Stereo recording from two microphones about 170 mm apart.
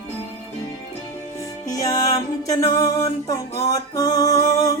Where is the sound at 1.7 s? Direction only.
20° left (ahead or behind).